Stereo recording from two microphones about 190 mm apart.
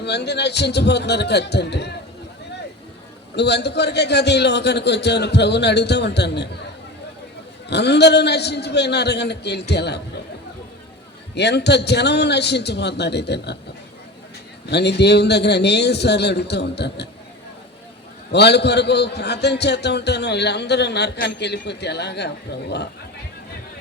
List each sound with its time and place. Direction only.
0.0 s a man's voice: 60° left (ahead or behind)
3.3 s a man's voice: 60° left (ahead or behind)
7.7 s a man's voice: 60° left (ahead or behind)
11.3 s a man's voice: 65° left (ahead or behind)
14.7 s a man's voice: 60° left (ahead or behind)
18.3 s a man's voice: 60° left (ahead or behind)